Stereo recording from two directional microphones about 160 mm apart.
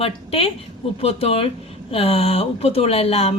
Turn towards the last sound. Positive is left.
turn(degrees=40)  # may be behind; listen again after turning